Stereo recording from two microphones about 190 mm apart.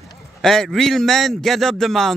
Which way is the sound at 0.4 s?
Centre (ahead or behind).